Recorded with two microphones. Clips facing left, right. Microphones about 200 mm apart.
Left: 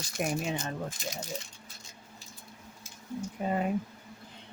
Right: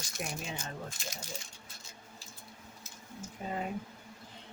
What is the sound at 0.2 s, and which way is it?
Speech, 60° left (ahead or behind).